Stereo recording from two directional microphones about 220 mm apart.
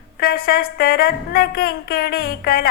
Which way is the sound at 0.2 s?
45° left (ahead or behind).